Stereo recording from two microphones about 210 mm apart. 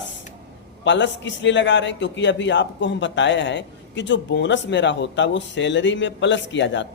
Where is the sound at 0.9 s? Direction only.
60° left (ahead or behind).